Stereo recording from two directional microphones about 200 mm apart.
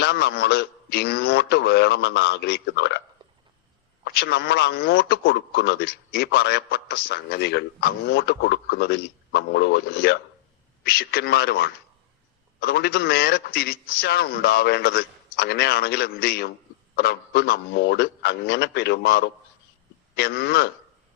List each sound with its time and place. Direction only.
0.0 s a man's voice: 55° left (ahead or behind)
4.0 s a man's voice: 55° left (ahead or behind)